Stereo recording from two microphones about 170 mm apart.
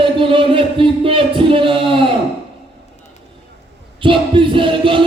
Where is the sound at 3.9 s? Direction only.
30° right (ahead or behind).